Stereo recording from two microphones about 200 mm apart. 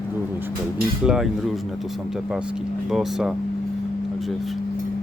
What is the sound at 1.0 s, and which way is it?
Speech, centre (ahead or behind).